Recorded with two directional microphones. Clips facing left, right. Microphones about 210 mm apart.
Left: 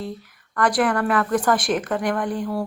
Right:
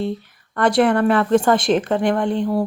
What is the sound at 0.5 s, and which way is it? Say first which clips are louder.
Speech: right 4 dB; 25° right (ahead or behind).